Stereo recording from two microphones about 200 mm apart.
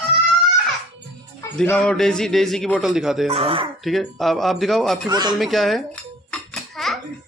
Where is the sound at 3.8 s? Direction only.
Centre (ahead or behind).